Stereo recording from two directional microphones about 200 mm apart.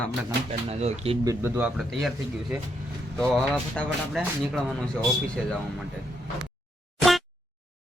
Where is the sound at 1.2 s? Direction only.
10° right (ahead or behind).